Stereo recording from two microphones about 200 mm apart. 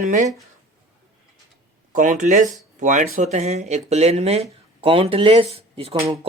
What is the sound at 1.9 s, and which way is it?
Speech, 40° right (ahead or behind).